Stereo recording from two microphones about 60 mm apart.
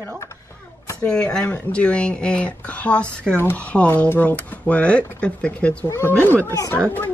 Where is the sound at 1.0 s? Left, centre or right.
Centre.